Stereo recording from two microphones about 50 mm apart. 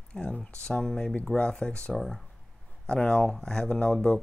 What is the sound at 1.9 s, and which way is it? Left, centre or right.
Speech, centre.